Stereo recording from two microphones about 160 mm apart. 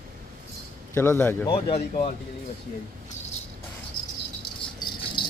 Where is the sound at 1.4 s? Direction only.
30° left (ahead or behind).